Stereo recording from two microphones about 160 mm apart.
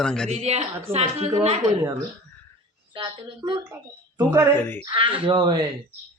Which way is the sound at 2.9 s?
30° right (ahead or behind).